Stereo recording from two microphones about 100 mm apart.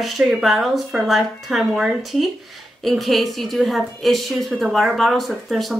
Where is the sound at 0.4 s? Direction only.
Centre (ahead or behind).